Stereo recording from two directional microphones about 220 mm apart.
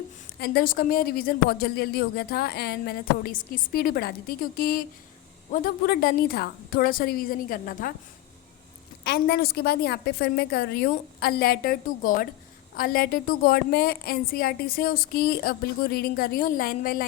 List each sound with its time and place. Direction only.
0.3 s a woman's voice: 45° left (ahead or behind)
9.0 s a woman's voice: 45° left (ahead or behind)